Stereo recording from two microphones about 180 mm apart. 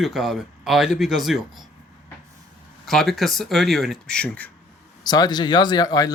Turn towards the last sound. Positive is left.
turn(degrees=20)  # may be behind; listen again after turning